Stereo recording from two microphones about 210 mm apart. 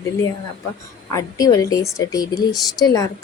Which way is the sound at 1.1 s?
15° left (ahead or behind).